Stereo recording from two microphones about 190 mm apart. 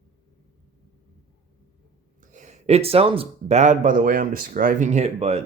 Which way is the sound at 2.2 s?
40° right (ahead or behind).